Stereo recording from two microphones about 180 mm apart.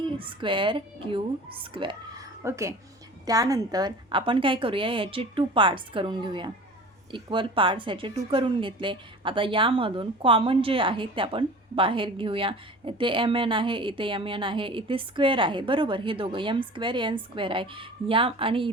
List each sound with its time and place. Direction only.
0.2 s speech: 30° right (ahead or behind)
2.4 s a woman's voice: 15° right (ahead or behind)